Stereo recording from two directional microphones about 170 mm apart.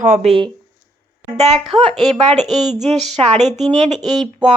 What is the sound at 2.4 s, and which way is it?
Speech, centre (ahead or behind).